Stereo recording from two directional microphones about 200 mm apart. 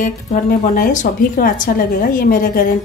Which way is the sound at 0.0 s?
40° left (ahead or behind).